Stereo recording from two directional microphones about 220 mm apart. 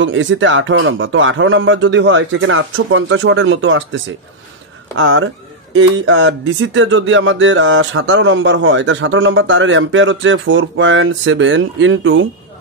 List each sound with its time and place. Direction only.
0.0 s speech: 55° right (ahead or behind)